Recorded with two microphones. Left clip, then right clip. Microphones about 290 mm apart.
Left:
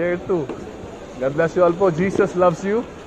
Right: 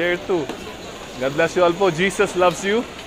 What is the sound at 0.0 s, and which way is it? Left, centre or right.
Speech, right.